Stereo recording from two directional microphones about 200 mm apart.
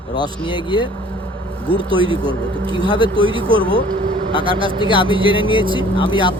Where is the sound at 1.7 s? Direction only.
25° right (ahead or behind).